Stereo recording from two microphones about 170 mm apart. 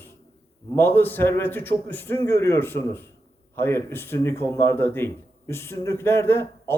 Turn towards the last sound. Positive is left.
turn(degrees=15)  # may be behind; listen again after turning